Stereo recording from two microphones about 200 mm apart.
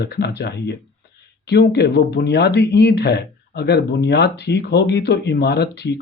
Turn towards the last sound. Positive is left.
turn(degrees=60)  # may be behind; listen again after turning